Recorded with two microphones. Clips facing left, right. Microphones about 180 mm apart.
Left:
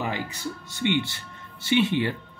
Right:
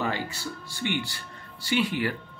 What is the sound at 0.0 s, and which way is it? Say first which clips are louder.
Speech: even; 15° left (ahead or behind).